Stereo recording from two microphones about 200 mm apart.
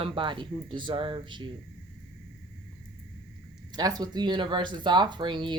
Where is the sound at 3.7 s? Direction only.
20° right (ahead or behind).